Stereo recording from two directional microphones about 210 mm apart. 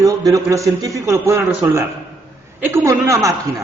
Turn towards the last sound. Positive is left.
turn(degrees=-15)  # may be behind; listen again after turning